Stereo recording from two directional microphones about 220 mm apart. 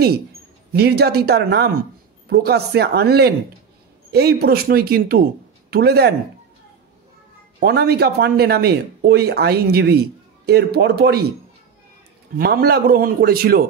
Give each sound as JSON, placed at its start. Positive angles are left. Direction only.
{"t": 0.7, "sound": "speech", "side_deg": -45}
{"t": 7.6, "sound": "speech", "side_deg": -45}
{"t": 12.4, "sound": "speech", "side_deg": -45}